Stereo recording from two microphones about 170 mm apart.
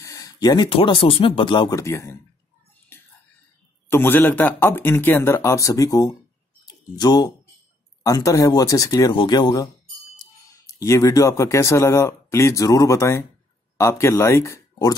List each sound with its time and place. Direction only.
0.0 s speech: 20° left (ahead or behind)
2.9 s whispering: 15° left (ahead or behind)
3.9 s speech: 15° left (ahead or behind)
10.7 s speech: 20° left (ahead or behind)